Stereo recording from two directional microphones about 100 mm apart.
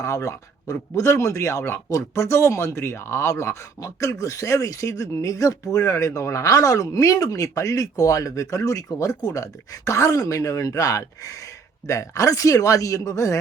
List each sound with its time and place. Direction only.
0.0 s speech: 30° left (ahead or behind)